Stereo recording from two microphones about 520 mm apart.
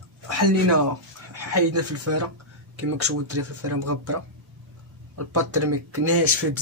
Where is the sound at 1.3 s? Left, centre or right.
Right.